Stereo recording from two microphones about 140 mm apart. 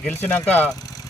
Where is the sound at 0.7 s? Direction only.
25° left (ahead or behind).